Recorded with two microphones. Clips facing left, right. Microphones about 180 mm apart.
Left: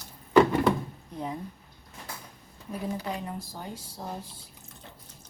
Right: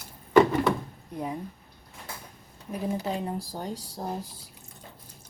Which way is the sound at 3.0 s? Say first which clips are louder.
Right 4 dB; 30° right (ahead or behind).